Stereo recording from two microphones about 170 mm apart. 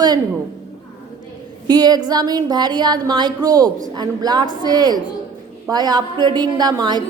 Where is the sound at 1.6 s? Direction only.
25° right (ahead or behind).